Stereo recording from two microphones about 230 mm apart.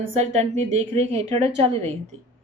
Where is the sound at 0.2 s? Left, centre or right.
Right.